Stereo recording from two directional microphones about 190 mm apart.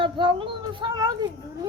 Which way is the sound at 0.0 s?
25° right (ahead or behind).